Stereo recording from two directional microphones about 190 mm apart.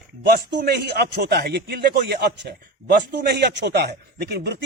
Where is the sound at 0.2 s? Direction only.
55° right (ahead or behind).